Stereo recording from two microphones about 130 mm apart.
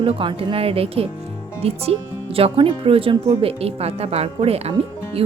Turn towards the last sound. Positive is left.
turn(degrees=-50)  # may be behind; listen again after turning